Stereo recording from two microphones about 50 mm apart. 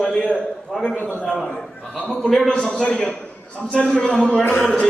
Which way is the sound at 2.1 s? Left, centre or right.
Centre.